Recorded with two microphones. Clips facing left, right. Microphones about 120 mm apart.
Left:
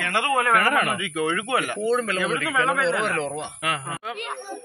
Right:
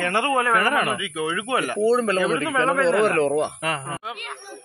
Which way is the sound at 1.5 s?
35° right (ahead or behind).